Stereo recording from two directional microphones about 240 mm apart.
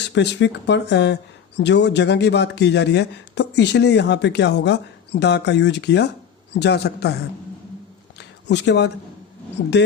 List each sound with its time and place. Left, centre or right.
0.0 s speech: left
8.2 s a sound: left
9.8 s speech: left